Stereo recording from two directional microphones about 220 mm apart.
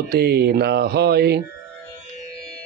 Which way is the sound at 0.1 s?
45° right (ahead or behind).